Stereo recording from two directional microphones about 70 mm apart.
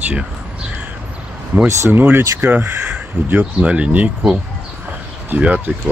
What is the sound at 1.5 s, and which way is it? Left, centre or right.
Speech, right.